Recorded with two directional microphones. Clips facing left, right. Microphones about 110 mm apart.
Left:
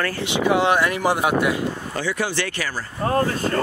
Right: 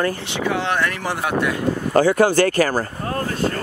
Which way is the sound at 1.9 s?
50° right (ahead or behind).